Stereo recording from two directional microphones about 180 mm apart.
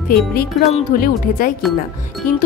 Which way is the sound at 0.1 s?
55° left (ahead or behind).